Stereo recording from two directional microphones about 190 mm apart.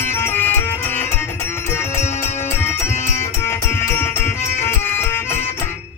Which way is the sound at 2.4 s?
10° left (ahead or behind).